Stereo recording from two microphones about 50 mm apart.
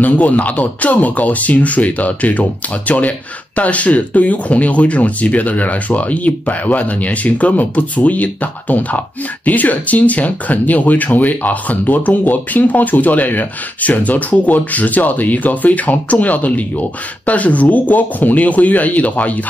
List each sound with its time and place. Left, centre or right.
0.0 s speech: left